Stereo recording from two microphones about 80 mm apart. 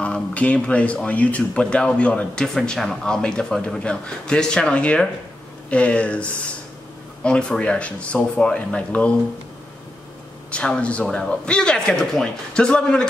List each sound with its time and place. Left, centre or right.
0.0 s speech: centre
10.5 s speech: centre